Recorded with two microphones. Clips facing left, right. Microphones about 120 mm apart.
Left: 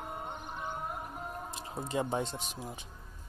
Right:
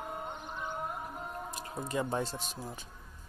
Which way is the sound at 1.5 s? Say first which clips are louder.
Even; 25° left (ahead or behind).